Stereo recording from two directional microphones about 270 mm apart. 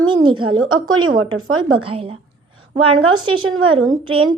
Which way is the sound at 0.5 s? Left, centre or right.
Right.